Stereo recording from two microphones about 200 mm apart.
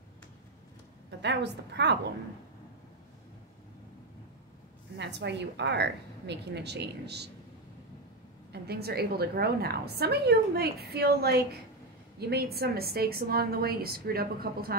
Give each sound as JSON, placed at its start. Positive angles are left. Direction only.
{"t": 1.2, "sound": "a woman's voice", "side_deg": -60}
{"t": 4.9, "sound": "a woman's voice", "side_deg": -60}
{"t": 8.5, "sound": "a woman's voice", "side_deg": -55}